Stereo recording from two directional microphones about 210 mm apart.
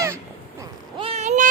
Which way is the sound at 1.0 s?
30° right (ahead or behind).